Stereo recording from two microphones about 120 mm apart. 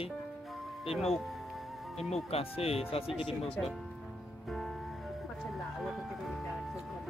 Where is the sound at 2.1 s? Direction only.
55° left (ahead or behind).